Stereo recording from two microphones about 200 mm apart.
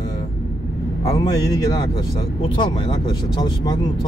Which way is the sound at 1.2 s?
20° left (ahead or behind).